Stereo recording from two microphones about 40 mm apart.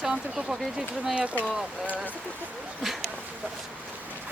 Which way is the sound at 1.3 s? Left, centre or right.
Left.